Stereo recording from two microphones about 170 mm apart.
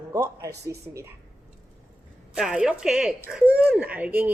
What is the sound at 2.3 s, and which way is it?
A woman's voice, 5° right (ahead or behind).